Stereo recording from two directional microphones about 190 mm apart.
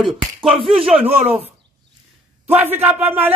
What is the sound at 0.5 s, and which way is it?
Speech, 30° right (ahead or behind).